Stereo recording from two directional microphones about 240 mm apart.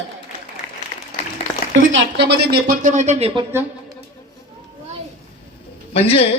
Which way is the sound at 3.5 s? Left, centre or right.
Centre.